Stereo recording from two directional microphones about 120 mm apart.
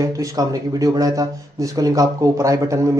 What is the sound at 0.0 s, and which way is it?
Speech, 30° right (ahead or behind).